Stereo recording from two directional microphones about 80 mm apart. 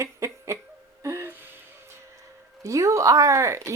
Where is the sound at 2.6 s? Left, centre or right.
Right.